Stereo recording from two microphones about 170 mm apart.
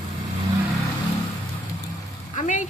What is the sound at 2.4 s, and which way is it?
Speech, 45° left (ahead or behind).